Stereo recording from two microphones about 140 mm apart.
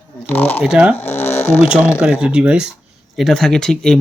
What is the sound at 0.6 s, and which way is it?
Speech, 5° right (ahead or behind).